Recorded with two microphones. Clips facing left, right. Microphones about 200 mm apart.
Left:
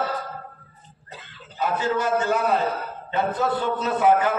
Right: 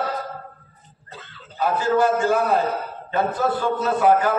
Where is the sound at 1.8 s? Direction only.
20° left (ahead or behind).